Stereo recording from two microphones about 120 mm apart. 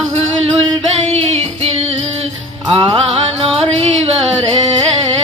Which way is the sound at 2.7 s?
45° right (ahead or behind).